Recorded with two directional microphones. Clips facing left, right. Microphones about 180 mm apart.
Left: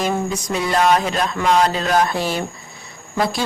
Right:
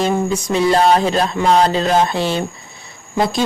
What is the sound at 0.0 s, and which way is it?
A woman's voice, 30° right (ahead or behind).